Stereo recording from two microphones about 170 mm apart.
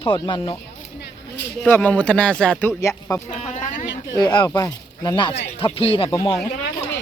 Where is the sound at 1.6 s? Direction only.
10° left (ahead or behind).